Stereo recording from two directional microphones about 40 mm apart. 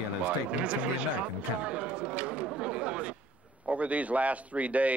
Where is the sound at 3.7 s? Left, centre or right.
Right.